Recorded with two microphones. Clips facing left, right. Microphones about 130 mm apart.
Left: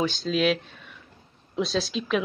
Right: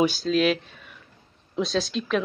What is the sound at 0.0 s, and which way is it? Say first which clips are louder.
Speech: right 3 dB; 5° right (ahead or behind).